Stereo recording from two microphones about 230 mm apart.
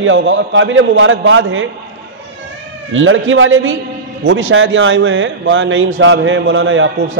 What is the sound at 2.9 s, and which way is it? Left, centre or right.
Speech, right.